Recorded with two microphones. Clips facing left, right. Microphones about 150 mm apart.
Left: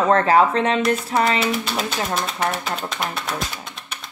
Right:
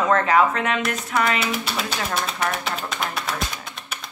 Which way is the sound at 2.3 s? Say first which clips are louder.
Left 2 dB; 25° left (ahead or behind).